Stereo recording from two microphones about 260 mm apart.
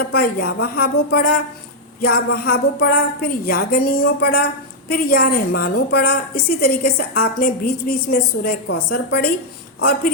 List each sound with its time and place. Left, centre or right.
0.1 s a woman's voice: left